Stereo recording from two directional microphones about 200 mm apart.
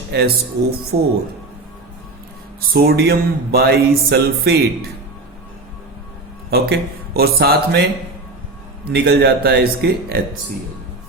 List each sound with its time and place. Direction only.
0.1 s speech: 55° right (ahead or behind)
0.9 s speech: 30° right (ahead or behind)
2.6 s music: 50° right (ahead or behind)
6.5 s music: 50° right (ahead or behind)